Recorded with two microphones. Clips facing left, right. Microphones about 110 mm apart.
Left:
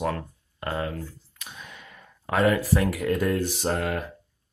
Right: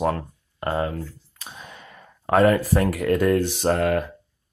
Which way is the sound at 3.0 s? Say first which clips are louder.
Right 5 dB; 70° right (ahead or behind).